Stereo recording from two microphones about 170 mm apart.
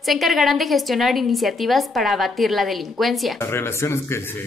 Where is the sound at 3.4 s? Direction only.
15° left (ahead or behind).